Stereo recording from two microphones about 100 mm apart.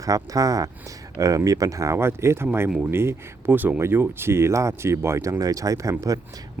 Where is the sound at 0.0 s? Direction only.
35° right (ahead or behind).